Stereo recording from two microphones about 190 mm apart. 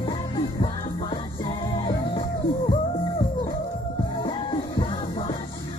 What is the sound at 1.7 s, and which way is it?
Music, 20° left (ahead or behind).